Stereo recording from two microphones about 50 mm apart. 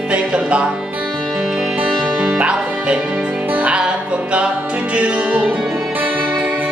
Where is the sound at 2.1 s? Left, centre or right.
Right.